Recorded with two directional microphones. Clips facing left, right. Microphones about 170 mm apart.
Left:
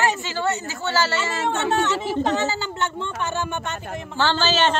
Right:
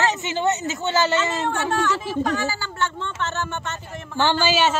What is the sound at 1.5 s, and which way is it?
A woman's voice, 20° left (ahead or behind).